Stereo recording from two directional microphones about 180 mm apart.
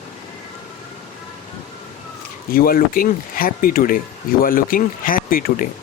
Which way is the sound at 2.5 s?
55° left (ahead or behind).